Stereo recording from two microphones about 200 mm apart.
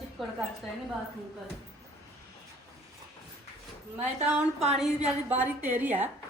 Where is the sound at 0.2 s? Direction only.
Centre (ahead or behind).